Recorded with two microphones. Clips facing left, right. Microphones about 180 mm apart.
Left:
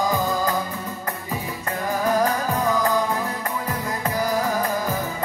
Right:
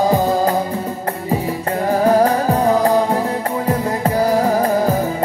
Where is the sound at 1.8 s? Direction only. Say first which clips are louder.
Right 8 dB; 30° right (ahead or behind).